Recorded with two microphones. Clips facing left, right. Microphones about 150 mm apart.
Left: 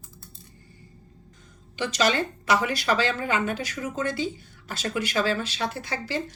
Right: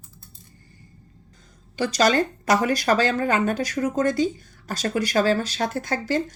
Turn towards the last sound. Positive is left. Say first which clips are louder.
# right 6 dB
turn(degrees=-45)  # may be behind; listen again after turning